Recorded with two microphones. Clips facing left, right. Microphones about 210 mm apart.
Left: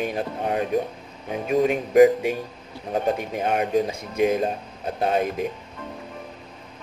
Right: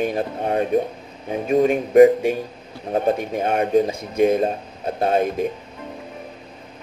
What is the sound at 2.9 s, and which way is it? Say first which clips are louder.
Speech: right 4 dB; 40° right (ahead or behind).